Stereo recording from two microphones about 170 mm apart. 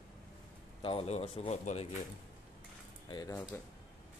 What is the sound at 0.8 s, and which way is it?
A man's voice, 35° left (ahead or behind).